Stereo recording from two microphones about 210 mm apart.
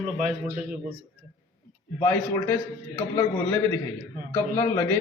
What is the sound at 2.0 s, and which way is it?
A man's voice, 15° left (ahead or behind).